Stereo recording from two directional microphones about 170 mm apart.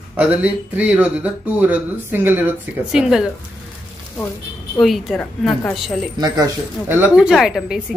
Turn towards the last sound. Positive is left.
turn(degrees=-5)  # may be behind; listen again after turning